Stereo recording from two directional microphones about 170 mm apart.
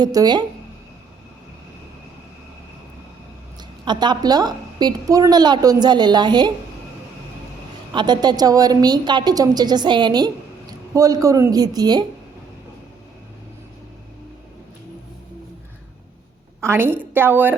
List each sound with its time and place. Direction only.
0.0 s a woman's voice: 25° right (ahead or behind)
3.8 s a woman's voice: 25° right (ahead or behind)
7.9 s a woman's voice: 25° right (ahead or behind)
16.6 s a woman's voice: 15° right (ahead or behind)